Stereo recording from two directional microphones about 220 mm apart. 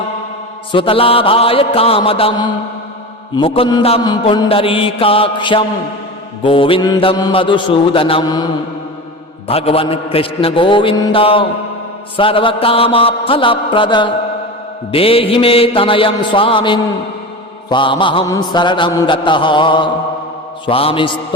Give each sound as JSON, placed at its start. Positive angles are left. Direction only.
{"t": 0.7, "sound": "mantra", "side_deg": 25}
{"t": 9.5, "sound": "mantra", "side_deg": 25}